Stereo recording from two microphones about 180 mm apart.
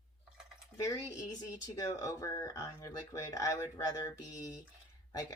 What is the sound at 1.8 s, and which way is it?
Speech, 20° left (ahead or behind).